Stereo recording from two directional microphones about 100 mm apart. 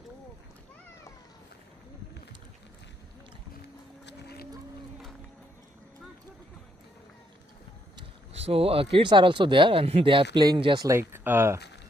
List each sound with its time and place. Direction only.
8.3 s speech: 85° right; by 10.8 s 55° right (ahead or behind)
10.8 s speech: 25° right (ahead or behind)